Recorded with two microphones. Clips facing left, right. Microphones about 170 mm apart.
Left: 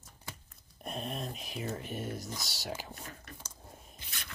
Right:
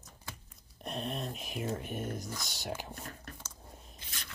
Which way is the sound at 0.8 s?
Centre (ahead or behind).